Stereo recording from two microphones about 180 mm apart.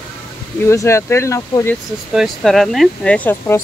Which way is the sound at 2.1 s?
Centre (ahead or behind).